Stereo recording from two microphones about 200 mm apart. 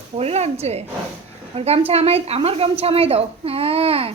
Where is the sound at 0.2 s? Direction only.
30° right (ahead or behind).